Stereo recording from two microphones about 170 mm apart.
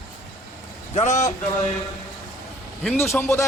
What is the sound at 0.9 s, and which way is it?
Speech, 45° left (ahead or behind).